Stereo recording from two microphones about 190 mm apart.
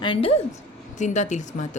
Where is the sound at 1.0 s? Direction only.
40° left (ahead or behind).